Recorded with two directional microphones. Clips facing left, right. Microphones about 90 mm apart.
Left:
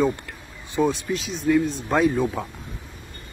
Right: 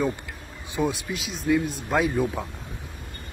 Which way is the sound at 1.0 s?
5° right (ahead or behind).